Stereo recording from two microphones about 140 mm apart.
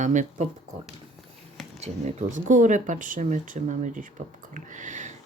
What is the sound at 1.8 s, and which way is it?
Speech, 55° right (ahead or behind).